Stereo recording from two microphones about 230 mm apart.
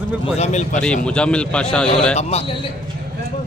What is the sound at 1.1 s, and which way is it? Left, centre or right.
Speech, centre.